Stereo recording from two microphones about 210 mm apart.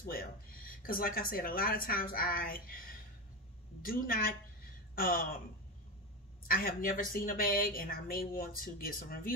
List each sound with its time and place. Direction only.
0.0 s a woman's voice: 45° left (ahead or behind)
6.4 s a woman's voice: 45° left (ahead or behind)